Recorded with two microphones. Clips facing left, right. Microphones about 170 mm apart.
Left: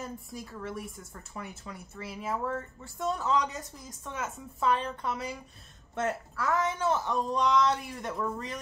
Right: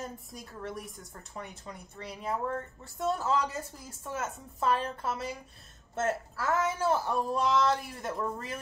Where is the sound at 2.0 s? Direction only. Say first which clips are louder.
Even; 5° left (ahead or behind).